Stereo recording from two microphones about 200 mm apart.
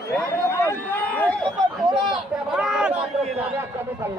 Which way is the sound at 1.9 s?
20° right (ahead or behind).